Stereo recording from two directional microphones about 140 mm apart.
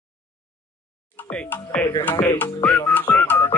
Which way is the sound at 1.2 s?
10° left (ahead or behind).